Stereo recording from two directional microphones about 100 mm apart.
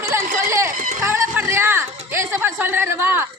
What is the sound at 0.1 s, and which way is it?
Speech, 25° right (ahead or behind).